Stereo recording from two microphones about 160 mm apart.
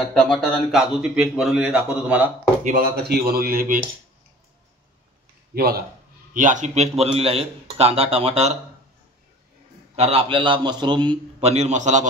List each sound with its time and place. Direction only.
0.1 s speech: 5° left (ahead or behind)
2.6 s speech: 75° right (ahead or behind)
5.5 s speech: 75° right (ahead or behind)
6.3 s speech: 50° right (ahead or behind)
9.9 s speech: 40° right (ahead or behind)